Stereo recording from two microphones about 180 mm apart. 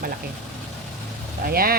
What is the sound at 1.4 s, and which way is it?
Speech, 55° right (ahead or behind).